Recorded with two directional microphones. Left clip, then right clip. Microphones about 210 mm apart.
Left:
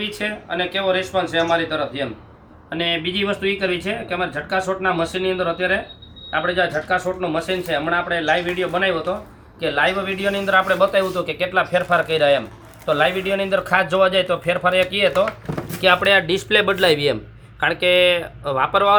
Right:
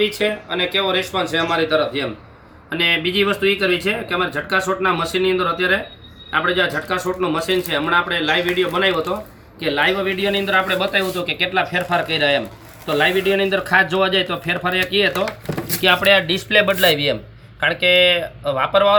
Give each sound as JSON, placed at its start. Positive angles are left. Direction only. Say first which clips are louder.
{"t": 0.0, "sound": "speech", "louder": "right 6 dB", "side_deg": 5}
{"t": 9.6, "sound": "a man's voice", "louder": "right 1 dB", "side_deg": 10}